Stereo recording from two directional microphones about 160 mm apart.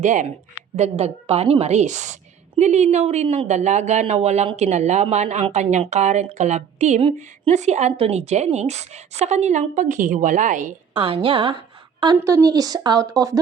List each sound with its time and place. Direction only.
0.0 s speech: 50° right (ahead or behind)
10.9 s a woman's voice: 35° right (ahead or behind)
12.1 s speech: 20° right (ahead or behind)